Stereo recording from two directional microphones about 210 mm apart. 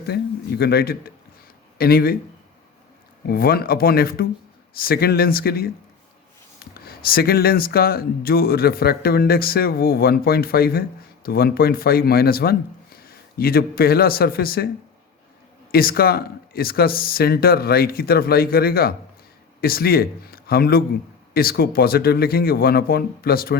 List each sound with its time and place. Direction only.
0.1 s speech: 50° left (ahead or behind)
3.2 s speech: 45° left (ahead or behind)
6.8 s speech: 45° left (ahead or behind)
15.7 s speech: 45° left (ahead or behind)